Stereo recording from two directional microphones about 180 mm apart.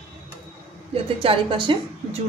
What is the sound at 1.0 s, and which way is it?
Speech, 30° right (ahead or behind).